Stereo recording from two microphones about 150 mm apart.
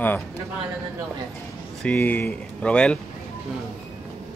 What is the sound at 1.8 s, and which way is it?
Speech, 10° left (ahead or behind).